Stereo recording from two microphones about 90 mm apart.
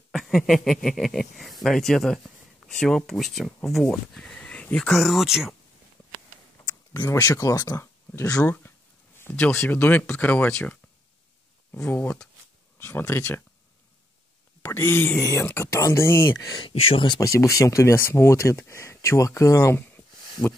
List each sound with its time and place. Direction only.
0.1 s speech: centre (ahead or behind)
7.1 s speech: 35° left (ahead or behind)
7.8 s a sound: 25° left (ahead or behind)
8.3 s speech: 15° left (ahead or behind)
14.6 s speech: 25° left (ahead or behind)
16.3 s speech: 45° left (ahead or behind)
16.6 s speech: 90° left; by 17.2 s 75° left (ahead or behind)
17.2 s speech: 35° left (ahead or behind)